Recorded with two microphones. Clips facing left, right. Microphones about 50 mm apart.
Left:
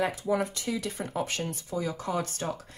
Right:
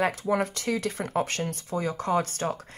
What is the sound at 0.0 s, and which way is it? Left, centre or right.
Speech, right.